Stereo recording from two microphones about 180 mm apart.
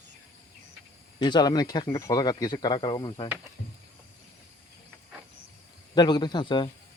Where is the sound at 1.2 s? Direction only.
25° left (ahead or behind).